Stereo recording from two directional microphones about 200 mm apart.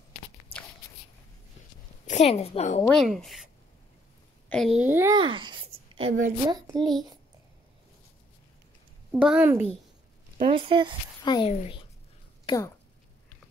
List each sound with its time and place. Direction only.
2.0 s a woman's voice: 35° left (ahead or behind)
2.9 s a child's voice: centre (ahead or behind)
4.5 s a child's voice: centre (ahead or behind)
5.1 s a sound: 25° right (ahead or behind)
6.4 s a child's voice: 20° right (ahead or behind)
9.1 s a child's voice: 5° right (ahead or behind)
10.5 s a child's voice: 25° right (ahead or behind)
11.2 s a woman's voice: 25° left (ahead or behind)
12.4 s speech: 15° left (ahead or behind)